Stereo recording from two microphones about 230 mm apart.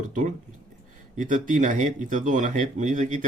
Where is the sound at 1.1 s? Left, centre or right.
Right.